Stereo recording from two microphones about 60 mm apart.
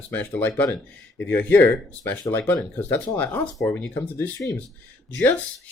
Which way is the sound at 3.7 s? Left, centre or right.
Left.